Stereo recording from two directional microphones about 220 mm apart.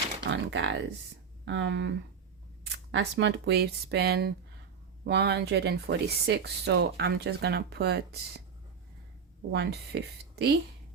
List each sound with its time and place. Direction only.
0.3 s speech: 55° right (ahead or behind)
9.5 s speech: 50° right (ahead or behind)